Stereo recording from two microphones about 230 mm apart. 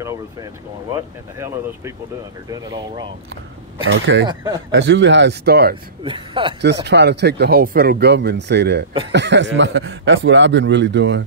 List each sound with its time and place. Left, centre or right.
2.5 s speech: centre
3.8 s speech: right
6.0 s speech: right
6.6 s speech: right